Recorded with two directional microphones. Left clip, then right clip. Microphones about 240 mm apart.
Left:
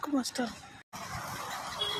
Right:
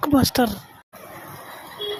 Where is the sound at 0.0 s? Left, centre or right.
Right.